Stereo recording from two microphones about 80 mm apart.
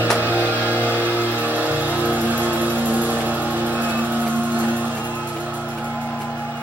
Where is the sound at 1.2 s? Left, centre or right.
Right.